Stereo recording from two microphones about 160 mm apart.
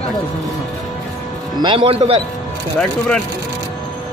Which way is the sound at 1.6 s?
30° right (ahead or behind).